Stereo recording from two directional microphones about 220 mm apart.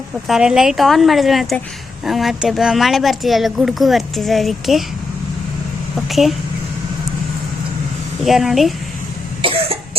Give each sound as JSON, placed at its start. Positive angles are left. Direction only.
{"t": 0.3, "sound": "speech", "side_deg": -5}
{"t": 6.1, "sound": "speech", "side_deg": 0}
{"t": 8.2, "sound": "speech", "side_deg": 0}
{"t": 9.4, "sound": "cough", "side_deg": -25}